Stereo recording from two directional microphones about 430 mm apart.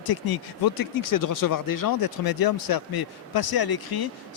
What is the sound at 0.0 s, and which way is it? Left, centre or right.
Speech, left.